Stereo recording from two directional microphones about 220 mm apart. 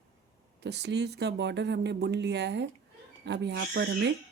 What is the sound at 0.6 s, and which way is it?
Speech, 50° right (ahead or behind).